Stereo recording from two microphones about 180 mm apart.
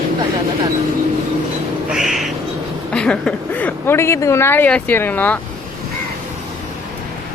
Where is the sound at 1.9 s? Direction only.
Centre (ahead or behind).